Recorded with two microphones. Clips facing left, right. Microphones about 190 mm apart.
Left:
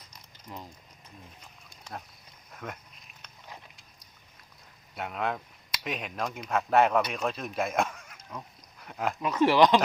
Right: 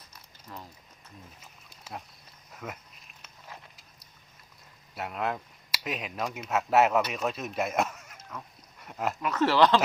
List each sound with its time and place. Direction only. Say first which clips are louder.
0.1 s a sound: left 2 dB; 15° left (ahead or behind)
1.4 s pig: left 1 dB; 5° right (ahead or behind)
2.5 s speech: even; 5° right (ahead or behind)
4.9 s speech: even; 5° right (ahead or behind)
9.2 s speech: left 2 dB; 15° left (ahead or behind)